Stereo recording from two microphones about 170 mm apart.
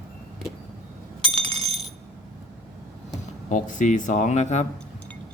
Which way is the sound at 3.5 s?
50° left (ahead or behind).